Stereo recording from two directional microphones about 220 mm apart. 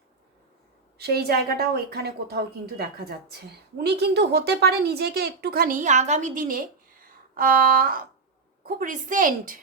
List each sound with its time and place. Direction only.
0.9 s a woman's voice: 45° right (ahead or behind)